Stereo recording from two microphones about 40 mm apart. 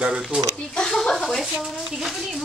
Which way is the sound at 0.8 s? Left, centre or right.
Centre.